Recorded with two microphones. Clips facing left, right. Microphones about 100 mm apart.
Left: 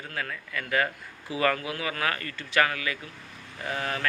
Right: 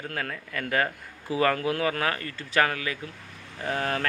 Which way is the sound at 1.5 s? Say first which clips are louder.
Right 5 dB; 50° right (ahead or behind).